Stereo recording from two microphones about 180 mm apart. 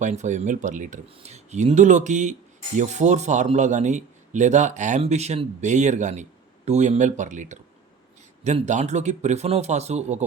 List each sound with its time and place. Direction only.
0.0 s speech: 40° right (ahead or behind)